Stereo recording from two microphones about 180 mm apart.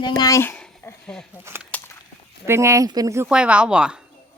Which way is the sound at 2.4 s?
15° right (ahead or behind).